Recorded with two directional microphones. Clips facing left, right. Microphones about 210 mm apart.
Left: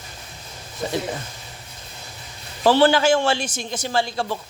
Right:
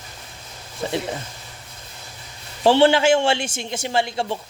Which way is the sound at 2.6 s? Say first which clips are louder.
Right 1 dB; 25° right (ahead or behind).